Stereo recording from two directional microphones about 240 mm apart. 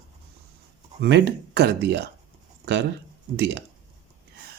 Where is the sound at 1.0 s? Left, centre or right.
Right.